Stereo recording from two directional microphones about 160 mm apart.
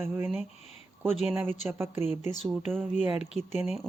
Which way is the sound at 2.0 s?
40° left (ahead or behind).